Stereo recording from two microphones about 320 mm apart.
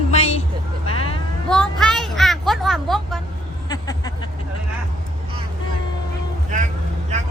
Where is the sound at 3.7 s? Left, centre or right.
Centre.